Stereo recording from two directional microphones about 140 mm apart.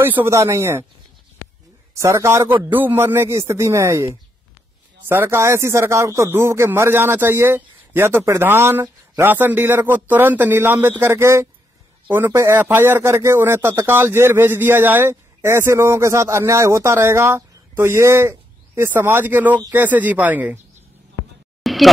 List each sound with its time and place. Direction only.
0.0 s a man's voice: 15° right (ahead or behind)
2.0 s a man's voice: 20° right (ahead or behind)
21.6 s a sound: centre (ahead or behind)